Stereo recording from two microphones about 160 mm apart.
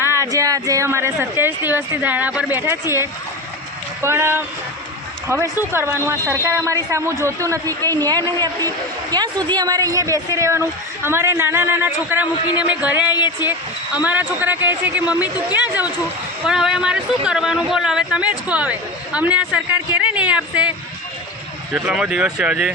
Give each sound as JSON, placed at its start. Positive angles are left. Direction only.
{"t": 0.1, "sound": "speech", "side_deg": -20}
{"t": 13.1, "sound": "speech", "side_deg": 25}
{"t": 13.5, "sound": "speech", "side_deg": -10}